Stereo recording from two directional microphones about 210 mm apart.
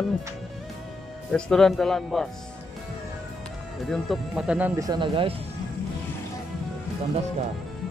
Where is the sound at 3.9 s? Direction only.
Centre (ahead or behind); by 5.3 s 25° right (ahead or behind).